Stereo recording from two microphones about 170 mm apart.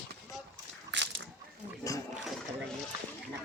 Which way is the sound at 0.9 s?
90° right.